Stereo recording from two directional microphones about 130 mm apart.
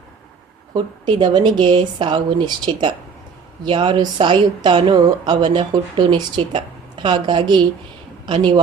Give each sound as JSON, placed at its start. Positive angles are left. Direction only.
{"t": 0.7, "sound": "speech", "side_deg": -35}